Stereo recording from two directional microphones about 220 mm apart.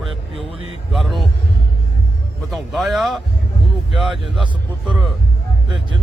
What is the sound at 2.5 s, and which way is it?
A man's voice, centre (ahead or behind).